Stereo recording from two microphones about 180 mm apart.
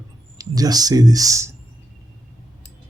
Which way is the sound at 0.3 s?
20° right (ahead or behind).